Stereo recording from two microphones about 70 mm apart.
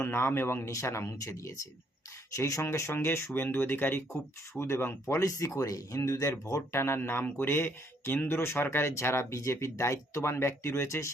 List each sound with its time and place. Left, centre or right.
0.0 s speech: left